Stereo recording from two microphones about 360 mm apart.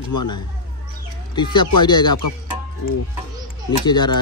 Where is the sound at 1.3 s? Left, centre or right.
Centre.